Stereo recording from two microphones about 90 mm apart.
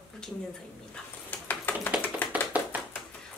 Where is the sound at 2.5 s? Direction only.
15° right (ahead or behind).